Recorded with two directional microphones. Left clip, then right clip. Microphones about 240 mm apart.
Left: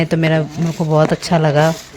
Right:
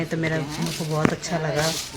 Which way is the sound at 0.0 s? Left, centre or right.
Left.